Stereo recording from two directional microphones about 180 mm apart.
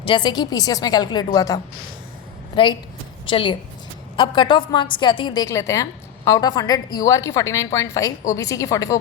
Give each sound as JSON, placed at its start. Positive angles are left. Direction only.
{"t": 0.0, "sound": "a woman's voice", "side_deg": 25}